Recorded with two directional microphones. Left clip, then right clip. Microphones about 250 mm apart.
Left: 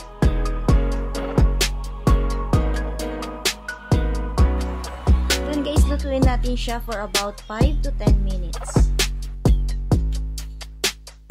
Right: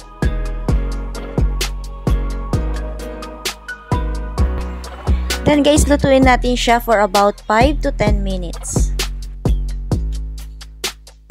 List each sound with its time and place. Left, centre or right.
0.2 s music: centre
5.6 s speech: right
8.9 s music: centre